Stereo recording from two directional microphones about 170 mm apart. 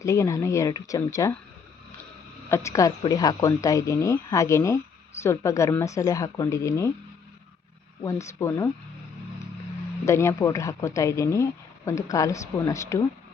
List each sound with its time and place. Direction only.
0.0 s speech: 20° left (ahead or behind)
2.5 s speech: 20° left (ahead or behind)
8.0 s speech: 15° left (ahead or behind)
10.1 s speech: 15° left (ahead or behind)